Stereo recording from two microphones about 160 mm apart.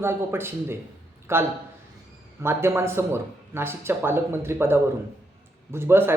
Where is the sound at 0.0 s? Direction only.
15° right (ahead or behind).